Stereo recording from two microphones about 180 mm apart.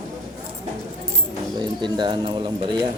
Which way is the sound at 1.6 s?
25° right (ahead or behind).